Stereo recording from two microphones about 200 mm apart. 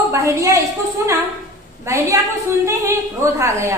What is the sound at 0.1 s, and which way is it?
A woman's voice, 15° right (ahead or behind).